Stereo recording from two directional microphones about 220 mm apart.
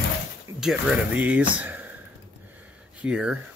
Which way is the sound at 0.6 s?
5° right (ahead or behind).